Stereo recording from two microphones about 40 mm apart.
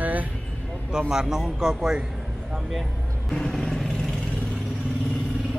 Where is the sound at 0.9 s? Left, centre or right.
Centre.